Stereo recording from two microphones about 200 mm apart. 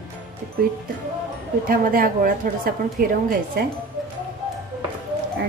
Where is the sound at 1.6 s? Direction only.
45° right (ahead or behind).